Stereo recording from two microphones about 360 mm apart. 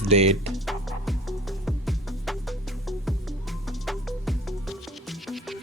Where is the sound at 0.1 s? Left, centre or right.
Centre.